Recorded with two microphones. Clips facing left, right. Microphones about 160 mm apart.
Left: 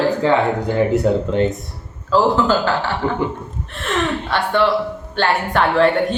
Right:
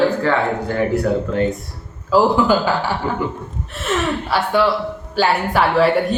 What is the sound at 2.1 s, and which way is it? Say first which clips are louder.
Speech: right 1 dB; 10° right (ahead or behind).